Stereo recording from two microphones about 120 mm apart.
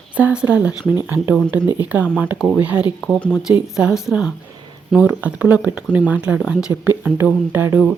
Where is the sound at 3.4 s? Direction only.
5° right (ahead or behind).